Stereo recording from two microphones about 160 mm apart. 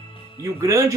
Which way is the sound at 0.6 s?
20° right (ahead or behind).